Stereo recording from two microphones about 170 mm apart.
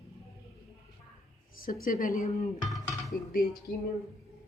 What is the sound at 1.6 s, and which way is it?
Speech, 55° left (ahead or behind).